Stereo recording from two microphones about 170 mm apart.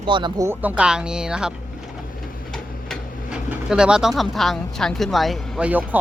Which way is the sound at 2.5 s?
Centre (ahead or behind).